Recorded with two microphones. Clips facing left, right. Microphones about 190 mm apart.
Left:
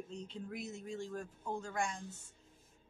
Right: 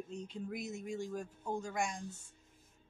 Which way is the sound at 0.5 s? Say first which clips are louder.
Right 2 dB; 10° right (ahead or behind).